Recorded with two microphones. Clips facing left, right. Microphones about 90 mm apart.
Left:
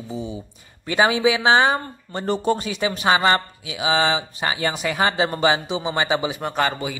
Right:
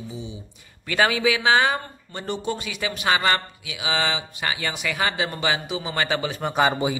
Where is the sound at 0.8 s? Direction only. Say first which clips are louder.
Left 3 dB; 25° left (ahead or behind).